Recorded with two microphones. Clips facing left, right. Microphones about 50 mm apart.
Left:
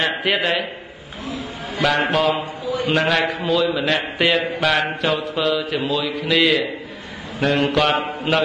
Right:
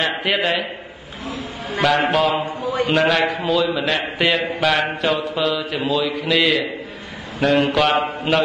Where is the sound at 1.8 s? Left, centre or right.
Centre.